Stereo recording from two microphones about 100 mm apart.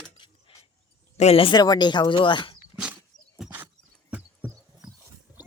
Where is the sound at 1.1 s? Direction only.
80° left.